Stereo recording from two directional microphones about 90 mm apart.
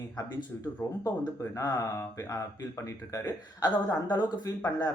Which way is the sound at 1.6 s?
40° left (ahead or behind).